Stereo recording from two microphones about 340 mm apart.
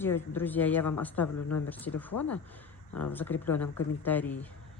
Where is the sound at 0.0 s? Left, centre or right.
Centre.